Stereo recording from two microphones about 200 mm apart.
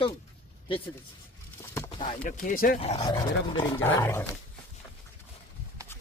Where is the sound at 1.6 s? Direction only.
15° left (ahead or behind).